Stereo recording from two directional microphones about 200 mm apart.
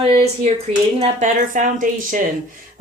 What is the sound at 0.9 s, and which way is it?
Speech, 35° right (ahead or behind).